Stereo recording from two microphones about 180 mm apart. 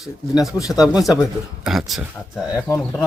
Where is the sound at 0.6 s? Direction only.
20° left (ahead or behind).